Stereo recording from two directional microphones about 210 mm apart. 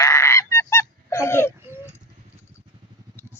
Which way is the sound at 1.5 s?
10° right (ahead or behind).